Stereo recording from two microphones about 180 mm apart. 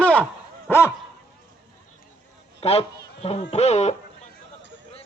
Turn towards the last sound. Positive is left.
turn(degrees=35)  # may be behind; listen again after turning